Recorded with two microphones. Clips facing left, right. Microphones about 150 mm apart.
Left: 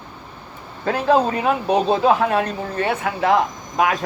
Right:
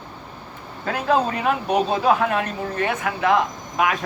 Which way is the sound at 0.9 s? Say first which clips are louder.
Left 4 dB; 30° left (ahead or behind).